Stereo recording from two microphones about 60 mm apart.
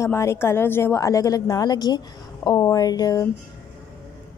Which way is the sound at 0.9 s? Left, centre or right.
Left.